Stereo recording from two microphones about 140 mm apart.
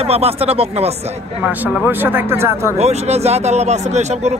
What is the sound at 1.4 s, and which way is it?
Speech, 15° right (ahead or behind).